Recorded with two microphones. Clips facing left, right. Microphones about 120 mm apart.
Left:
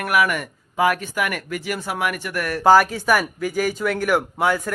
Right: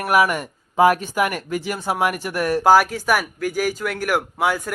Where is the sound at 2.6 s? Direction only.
5° right (ahead or behind).